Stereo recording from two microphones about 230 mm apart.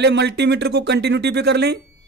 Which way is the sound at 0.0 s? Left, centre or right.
Right.